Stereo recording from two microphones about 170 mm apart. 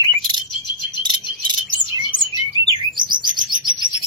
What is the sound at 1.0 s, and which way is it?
Cricket, 25° right (ahead or behind).